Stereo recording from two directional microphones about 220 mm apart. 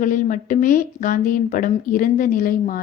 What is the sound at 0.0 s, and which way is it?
A woman's voice, 35° left (ahead or behind).